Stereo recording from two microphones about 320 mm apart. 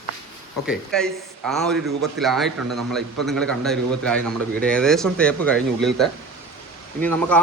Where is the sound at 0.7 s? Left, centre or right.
Centre.